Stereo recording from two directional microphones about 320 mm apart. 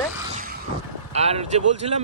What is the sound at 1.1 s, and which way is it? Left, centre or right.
Speech, centre.